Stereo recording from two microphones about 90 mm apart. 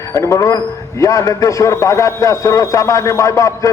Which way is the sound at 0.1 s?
35° left (ahead or behind).